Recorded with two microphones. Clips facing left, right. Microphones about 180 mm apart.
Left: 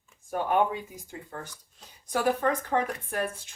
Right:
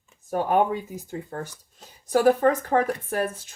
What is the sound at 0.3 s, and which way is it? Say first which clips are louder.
Speech: right 4 dB; 40° right (ahead or behind).